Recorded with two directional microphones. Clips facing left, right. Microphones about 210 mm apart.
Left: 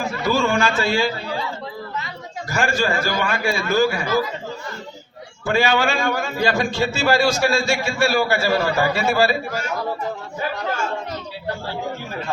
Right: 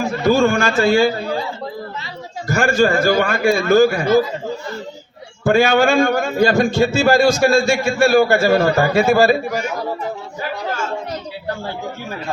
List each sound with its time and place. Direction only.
0.3 s a man's voice: 45° right (ahead or behind)
2.5 s a man's voice: 50° right (ahead or behind)
5.5 s a man's voice: 50° right (ahead or behind)